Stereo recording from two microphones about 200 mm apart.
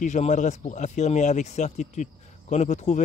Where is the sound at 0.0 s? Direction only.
35° left (ahead or behind).